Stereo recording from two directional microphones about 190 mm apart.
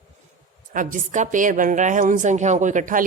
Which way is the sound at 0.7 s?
45° right (ahead or behind).